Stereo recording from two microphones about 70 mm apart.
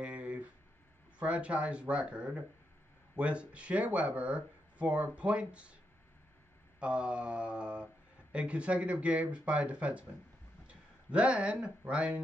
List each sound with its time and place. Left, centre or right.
0.0 s a sound: centre
1.2 s speech: centre
6.8 s speech: centre